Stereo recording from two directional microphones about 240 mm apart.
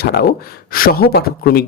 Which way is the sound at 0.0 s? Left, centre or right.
Left.